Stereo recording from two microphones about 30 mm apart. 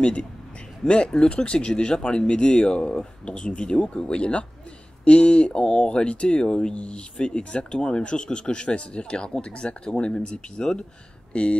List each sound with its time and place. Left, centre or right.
0.0 s speech: left
10.6 s speech: left
11.3 s speech: left